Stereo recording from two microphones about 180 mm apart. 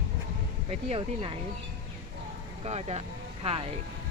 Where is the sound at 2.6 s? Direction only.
35° right (ahead or behind).